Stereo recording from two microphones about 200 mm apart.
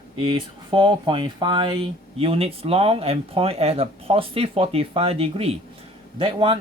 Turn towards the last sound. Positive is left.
turn(degrees=-25)  # may be behind; listen again after turning